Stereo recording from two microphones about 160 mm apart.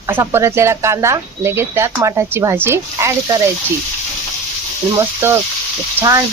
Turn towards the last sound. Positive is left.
turn(degrees=-20)  # may be behind; listen again after turning